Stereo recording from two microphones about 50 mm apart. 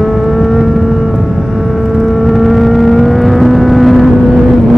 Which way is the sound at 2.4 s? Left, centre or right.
Centre.